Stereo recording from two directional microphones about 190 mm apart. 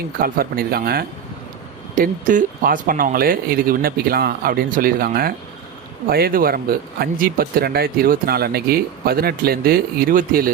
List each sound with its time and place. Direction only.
0.2 s speech: 50° right (ahead or behind)